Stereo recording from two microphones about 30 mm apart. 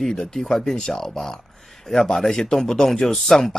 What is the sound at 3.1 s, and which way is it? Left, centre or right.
Speech, centre.